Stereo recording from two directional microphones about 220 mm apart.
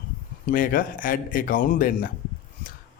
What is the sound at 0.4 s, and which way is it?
Speech, 40° left (ahead or behind).